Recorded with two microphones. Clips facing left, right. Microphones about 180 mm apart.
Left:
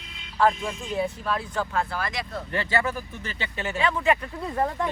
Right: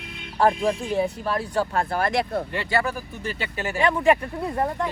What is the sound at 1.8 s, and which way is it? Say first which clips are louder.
Speech: right 8 dB; 55° right (ahead or behind).